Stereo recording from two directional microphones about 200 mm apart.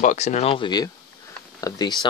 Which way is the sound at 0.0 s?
35° left (ahead or behind).